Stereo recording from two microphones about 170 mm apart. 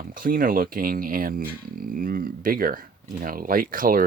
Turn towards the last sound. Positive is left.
turn(degrees=-55)  # may be behind; listen again after turning